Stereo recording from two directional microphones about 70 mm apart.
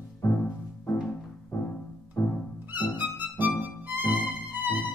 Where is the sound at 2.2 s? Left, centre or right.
Left.